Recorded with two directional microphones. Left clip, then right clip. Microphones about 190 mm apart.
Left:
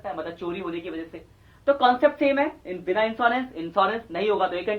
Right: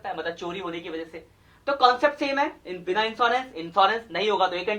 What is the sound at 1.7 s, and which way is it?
Speech, 20° left (ahead or behind).